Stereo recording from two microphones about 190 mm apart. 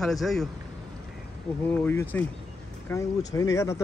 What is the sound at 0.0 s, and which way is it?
Speech, centre (ahead or behind).